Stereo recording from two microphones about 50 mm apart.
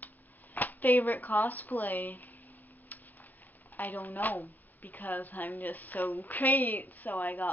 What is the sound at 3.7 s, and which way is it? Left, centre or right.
A woman's voice, left.